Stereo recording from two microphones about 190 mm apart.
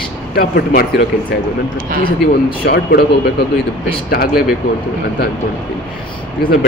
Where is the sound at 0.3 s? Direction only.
55° left (ahead or behind).